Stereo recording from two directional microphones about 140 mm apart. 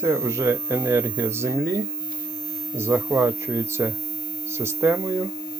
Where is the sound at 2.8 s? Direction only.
15° right (ahead or behind).